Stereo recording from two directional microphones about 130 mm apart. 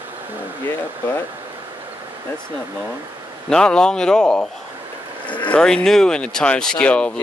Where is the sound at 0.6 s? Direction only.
15° left (ahead or behind).